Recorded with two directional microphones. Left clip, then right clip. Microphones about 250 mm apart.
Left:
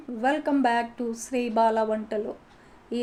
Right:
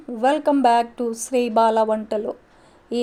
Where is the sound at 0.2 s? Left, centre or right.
Right.